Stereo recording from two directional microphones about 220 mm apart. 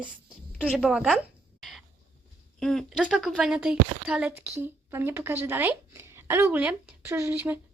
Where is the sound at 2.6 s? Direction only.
Centre (ahead or behind).